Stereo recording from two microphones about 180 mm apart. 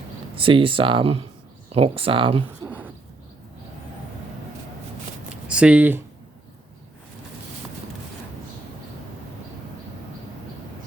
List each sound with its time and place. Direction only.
0.3 s speech: 30° right (ahead or behind)
5.3 s shuffling cards: 5° right (ahead or behind)